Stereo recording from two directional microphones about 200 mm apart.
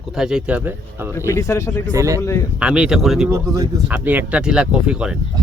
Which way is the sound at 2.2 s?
15° left (ahead or behind).